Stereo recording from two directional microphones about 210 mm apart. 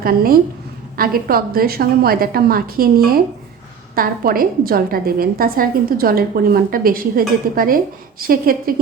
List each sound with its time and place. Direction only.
0.0 s a woman's voice: 45° right (ahead or behind)